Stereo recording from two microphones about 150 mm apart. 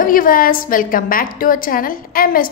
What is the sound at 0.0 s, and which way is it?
A woman's voice, 70° left (ahead or behind).